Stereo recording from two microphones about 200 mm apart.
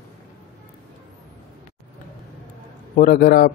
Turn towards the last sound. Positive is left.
turn(degrees=45)  # may be behind; listen again after turning